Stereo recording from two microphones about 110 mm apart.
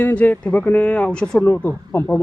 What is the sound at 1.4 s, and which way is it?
Speech, 20° left (ahead or behind).